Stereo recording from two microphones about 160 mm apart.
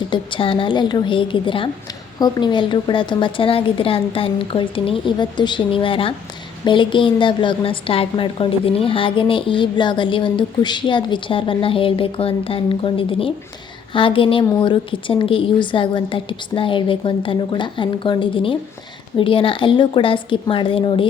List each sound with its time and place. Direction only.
0.1 s a woman's voice: 30° left (ahead or behind)